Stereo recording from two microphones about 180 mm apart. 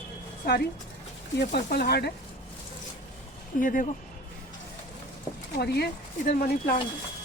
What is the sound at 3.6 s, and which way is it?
Speech, 50° left (ahead or behind).